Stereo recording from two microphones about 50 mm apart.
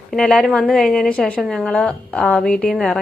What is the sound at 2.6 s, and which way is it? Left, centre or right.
Speech, centre.